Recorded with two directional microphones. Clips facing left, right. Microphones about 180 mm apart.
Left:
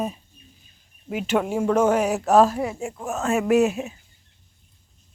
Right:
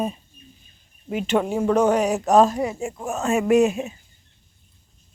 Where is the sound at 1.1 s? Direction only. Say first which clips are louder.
Right 1 dB; 5° left (ahead or behind).